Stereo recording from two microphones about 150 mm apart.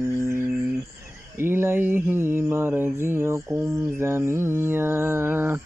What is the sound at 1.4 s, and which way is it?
Mantra, 15° right (ahead or behind).